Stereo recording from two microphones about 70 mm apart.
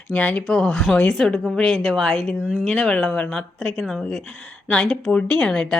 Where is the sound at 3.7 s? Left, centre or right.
Centre.